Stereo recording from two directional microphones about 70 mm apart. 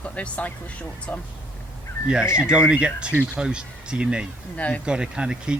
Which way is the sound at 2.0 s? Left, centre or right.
Centre.